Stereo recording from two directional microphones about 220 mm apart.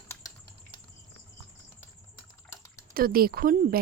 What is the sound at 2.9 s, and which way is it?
Speech, 40° right (ahead or behind).